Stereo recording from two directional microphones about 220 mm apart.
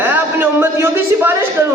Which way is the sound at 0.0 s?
10° right (ahead or behind).